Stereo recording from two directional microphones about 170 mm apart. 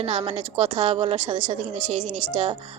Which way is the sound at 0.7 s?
30° right (ahead or behind).